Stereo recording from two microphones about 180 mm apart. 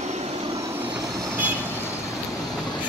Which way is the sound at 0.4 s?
15° right (ahead or behind).